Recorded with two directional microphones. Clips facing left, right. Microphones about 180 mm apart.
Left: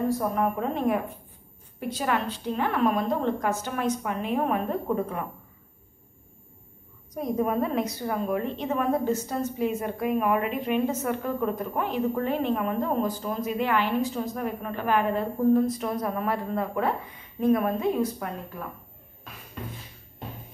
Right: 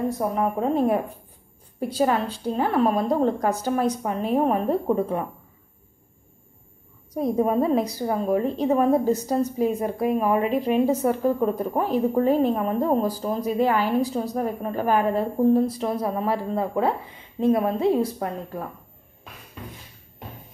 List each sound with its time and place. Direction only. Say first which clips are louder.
0.2 s a woman's voice: right 2 dB; 25° right (ahead or behind)
0.7 s a woman's voice: right 4 dB; 35° right (ahead or behind)
7.2 s a woman's voice: right 4 dB; 30° right (ahead or behind)